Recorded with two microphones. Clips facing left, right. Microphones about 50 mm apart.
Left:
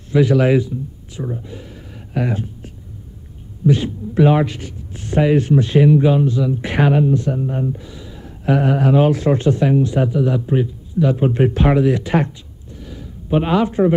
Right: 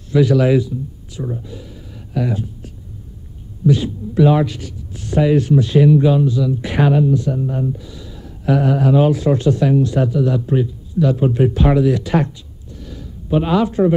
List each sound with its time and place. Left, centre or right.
0.1 s speech: left
2.1 s speech: left
6.2 s speech: left
12.8 s a sound: centre
13.4 s speech: left